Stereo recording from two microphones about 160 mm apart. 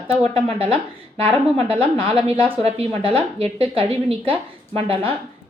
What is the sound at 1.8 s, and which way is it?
Speech, 35° right (ahead or behind).